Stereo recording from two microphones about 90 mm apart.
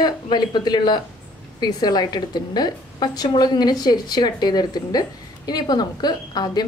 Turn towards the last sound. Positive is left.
turn(degrees=50)  # may be behind; listen again after turning